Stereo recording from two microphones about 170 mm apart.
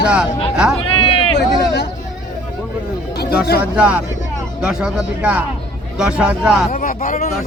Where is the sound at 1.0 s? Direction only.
35° left (ahead or behind).